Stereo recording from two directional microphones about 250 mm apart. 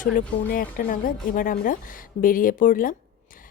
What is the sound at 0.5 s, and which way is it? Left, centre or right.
A woman's voice, left.